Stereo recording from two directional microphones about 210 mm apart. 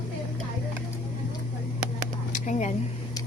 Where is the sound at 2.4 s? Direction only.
35° left (ahead or behind).